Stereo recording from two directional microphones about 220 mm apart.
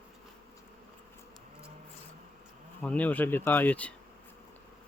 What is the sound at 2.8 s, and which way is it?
Speech, 5° left (ahead or behind).